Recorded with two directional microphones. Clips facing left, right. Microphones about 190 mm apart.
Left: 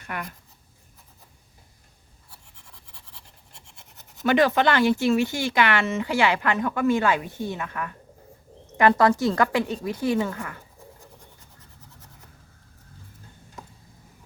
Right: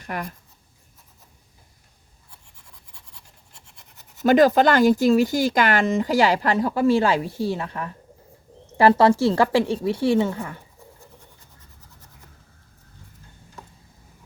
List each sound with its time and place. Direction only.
0.0 s speech: 40° right (ahead or behind)
4.2 s a woman's voice: 40° right (ahead or behind)